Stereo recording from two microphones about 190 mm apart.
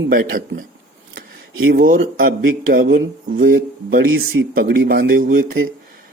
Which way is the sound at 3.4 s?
50° right (ahead or behind).